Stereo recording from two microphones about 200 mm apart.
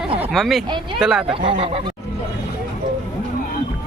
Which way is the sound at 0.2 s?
Centre (ahead or behind).